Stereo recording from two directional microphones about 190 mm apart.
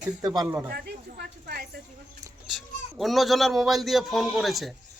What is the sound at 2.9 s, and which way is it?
A man's voice, centre (ahead or behind).